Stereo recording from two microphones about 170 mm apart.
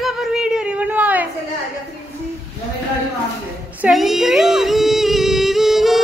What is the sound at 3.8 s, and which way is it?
Music, centre (ahead or behind).